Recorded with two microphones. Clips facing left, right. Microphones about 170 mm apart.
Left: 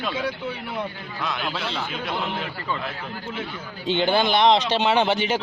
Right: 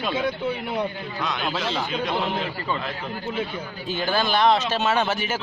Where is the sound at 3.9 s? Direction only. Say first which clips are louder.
Left 4 dB; 20° left (ahead or behind).